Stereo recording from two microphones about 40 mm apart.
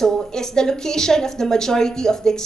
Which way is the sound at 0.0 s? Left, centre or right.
Centre.